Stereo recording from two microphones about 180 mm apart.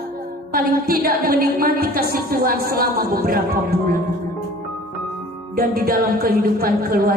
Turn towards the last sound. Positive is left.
turn(degrees=-55)  # may be behind; listen again after turning